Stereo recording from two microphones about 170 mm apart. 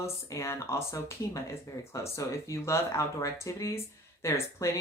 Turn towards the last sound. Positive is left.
turn(degrees=15)  # may be behind; listen again after turning